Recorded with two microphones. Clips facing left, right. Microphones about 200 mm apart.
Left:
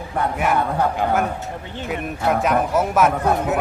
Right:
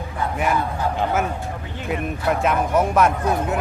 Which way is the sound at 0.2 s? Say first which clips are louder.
Left 2 dB; 60° left (ahead or behind).